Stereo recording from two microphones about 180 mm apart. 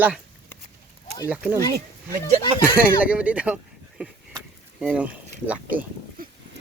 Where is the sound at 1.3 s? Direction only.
10° right (ahead or behind).